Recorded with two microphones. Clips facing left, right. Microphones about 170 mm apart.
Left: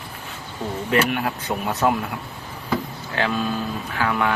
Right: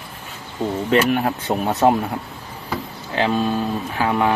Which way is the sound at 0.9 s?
35° right (ahead or behind).